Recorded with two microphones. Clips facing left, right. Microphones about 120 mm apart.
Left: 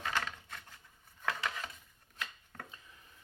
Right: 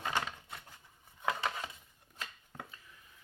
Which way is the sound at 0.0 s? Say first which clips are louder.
Right 1 dB; 20° right (ahead or behind).